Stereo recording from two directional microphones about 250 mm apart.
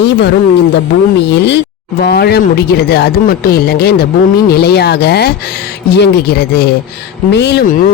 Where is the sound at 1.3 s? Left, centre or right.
Left.